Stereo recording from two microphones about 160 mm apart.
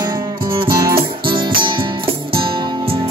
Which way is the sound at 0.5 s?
30° right (ahead or behind).